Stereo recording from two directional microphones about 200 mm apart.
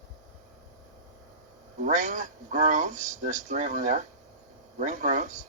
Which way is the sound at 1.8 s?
40° right (ahead or behind).